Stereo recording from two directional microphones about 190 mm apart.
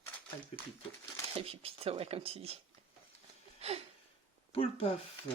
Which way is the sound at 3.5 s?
30° right (ahead or behind).